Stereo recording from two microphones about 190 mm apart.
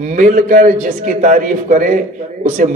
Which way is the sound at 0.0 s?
40° right (ahead or behind).